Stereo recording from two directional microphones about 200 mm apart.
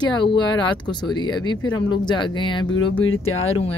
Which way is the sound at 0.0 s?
25° left (ahead or behind).